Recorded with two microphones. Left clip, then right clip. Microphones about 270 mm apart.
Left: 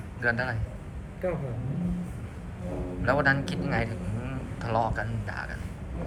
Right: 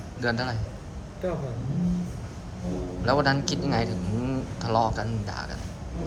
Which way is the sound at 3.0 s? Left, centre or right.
Centre.